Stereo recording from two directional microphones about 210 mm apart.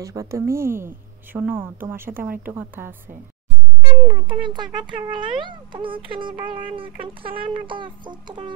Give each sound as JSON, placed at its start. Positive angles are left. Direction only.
{"t": 0.0, "sound": "a woman's voice", "side_deg": -15}
{"t": 3.9, "sound": "speech", "side_deg": -25}